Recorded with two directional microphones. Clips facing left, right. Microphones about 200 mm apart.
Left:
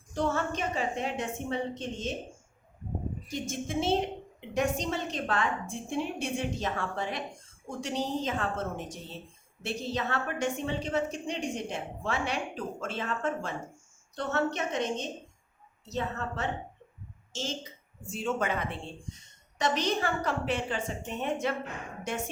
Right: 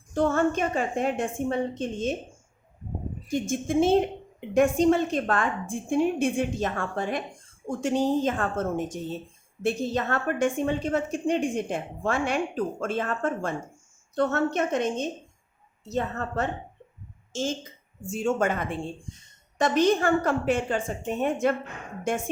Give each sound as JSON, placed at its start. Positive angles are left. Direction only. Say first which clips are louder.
{"t": 0.1, "sound": "a woman's voice", "louder": "right 7 dB", "side_deg": -50}
{"t": 3.2, "sound": "a woman's voice", "louder": "right 10 dB", "side_deg": -50}